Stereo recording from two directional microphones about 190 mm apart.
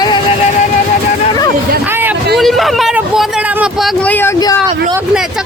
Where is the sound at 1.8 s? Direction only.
10° right (ahead or behind).